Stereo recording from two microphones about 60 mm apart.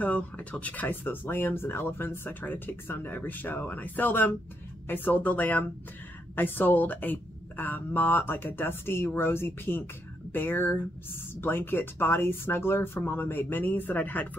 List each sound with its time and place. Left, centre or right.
0.0 s speech: left